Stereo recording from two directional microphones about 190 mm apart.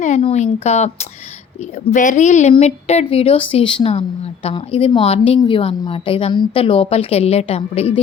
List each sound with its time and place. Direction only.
0.0 s a woman's voice: 35° left (ahead or behind)